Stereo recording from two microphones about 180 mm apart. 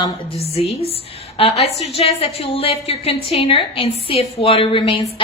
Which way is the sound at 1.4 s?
35° left (ahead or behind).